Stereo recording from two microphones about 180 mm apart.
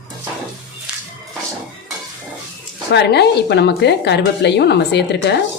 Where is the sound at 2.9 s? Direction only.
70° left (ahead or behind).